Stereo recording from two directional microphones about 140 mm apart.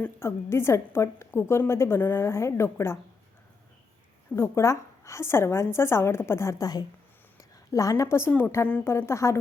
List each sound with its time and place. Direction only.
0.0 s a woman's voice: 20° left (ahead or behind)
4.4 s a woman's voice: 20° left (ahead or behind)